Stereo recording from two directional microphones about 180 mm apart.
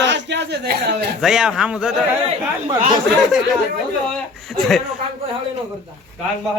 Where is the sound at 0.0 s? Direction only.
75° right (ahead or behind).